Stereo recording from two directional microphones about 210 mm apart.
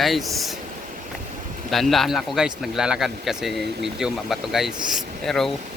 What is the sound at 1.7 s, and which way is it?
A man's voice, centre (ahead or behind).